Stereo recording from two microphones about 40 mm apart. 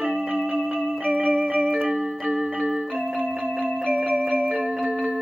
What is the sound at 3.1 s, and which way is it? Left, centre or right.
Music, centre.